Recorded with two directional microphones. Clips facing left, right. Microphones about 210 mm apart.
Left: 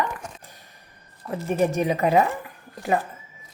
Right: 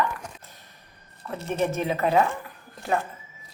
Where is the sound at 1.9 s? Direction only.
15° left (ahead or behind).